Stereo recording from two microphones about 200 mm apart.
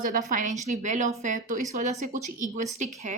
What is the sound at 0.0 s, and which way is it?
A woman's voice, 40° right (ahead or behind).